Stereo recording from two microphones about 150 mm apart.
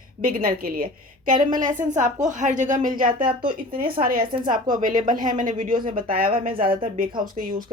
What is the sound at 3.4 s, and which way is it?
Speech, 35° right (ahead or behind).